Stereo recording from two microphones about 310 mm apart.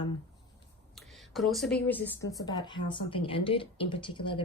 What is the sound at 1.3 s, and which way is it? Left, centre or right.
Speech, centre.